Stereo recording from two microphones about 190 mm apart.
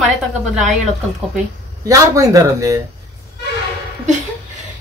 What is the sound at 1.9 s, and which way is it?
Speech, 15° right (ahead or behind).